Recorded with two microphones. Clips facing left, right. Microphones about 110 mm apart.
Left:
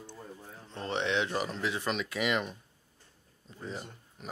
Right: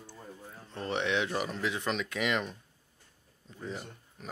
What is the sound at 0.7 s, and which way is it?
Speech, 25° left (ahead or behind).